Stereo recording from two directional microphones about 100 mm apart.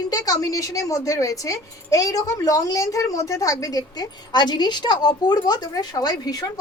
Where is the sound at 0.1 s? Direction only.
35° left (ahead or behind).